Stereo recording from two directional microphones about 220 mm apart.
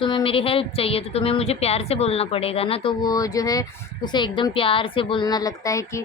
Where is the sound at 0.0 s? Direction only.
25° left (ahead or behind).